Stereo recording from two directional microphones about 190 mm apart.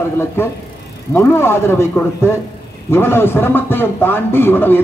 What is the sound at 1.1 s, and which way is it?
A man's voice, 15° left (ahead or behind).